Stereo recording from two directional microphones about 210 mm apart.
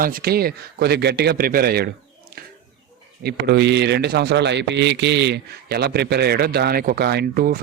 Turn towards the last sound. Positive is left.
turn(degrees=-45)  # may be behind; listen again after turning